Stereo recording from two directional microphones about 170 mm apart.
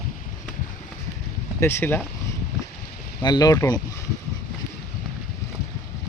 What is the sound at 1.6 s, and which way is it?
Speech, 15° left (ahead or behind).